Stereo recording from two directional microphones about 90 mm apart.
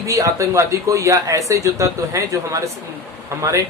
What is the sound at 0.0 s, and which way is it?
Speech, 35° right (ahead or behind).